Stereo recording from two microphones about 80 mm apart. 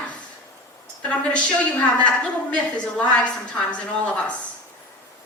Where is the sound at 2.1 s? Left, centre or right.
Centre.